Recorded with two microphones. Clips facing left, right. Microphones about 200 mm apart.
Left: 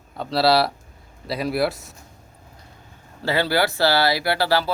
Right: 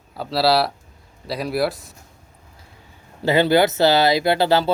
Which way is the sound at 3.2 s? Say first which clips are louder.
Right 5 dB; 20° right (ahead or behind).